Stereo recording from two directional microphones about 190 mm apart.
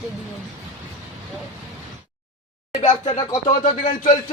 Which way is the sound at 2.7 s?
30° left (ahead or behind).